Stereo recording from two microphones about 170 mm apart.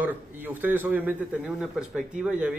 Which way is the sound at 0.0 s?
10° right (ahead or behind).